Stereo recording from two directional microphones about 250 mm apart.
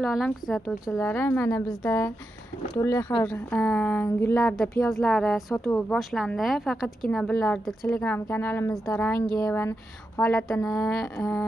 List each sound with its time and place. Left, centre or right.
0.0 s a woman's voice: centre